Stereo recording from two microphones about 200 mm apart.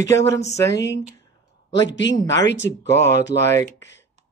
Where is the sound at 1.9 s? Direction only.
60° left (ahead or behind).